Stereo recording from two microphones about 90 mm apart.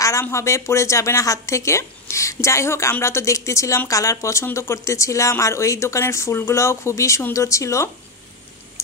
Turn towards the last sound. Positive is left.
turn(degrees=35)  # may be behind; listen again after turning